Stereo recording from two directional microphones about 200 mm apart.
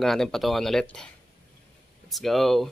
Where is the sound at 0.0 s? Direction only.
Centre (ahead or behind).